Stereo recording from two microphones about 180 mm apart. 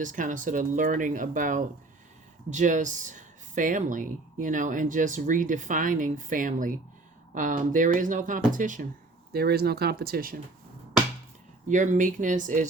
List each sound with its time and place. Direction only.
0.0 s speech: 45° right (ahead or behind)
9.3 s speech: 60° right (ahead or behind)
11.7 s speech: 45° right (ahead or behind)